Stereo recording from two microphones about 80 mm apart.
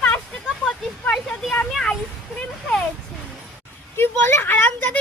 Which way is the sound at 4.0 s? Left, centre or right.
Left.